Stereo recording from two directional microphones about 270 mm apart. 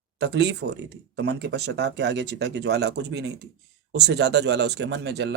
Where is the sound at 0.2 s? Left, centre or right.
Right.